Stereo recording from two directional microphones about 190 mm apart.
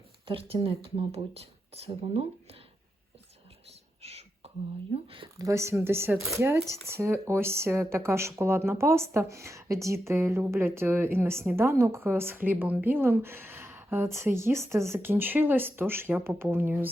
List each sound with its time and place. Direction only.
0.3 s speech: 30° right (ahead or behind)
3.7 s whispering: 35° right (ahead or behind)
5.0 s speech: 25° right (ahead or behind); by 16.9 s 10° right (ahead or behind)